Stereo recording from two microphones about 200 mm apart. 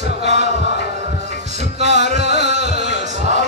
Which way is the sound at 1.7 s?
35° right (ahead or behind).